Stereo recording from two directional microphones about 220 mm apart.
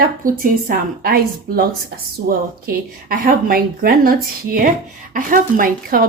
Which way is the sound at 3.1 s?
40° right (ahead or behind).